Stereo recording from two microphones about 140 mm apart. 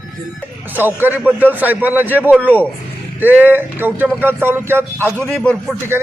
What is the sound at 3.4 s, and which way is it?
A man's voice, 15° right (ahead or behind).